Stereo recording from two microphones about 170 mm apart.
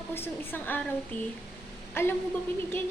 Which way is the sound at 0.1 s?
10° left (ahead or behind).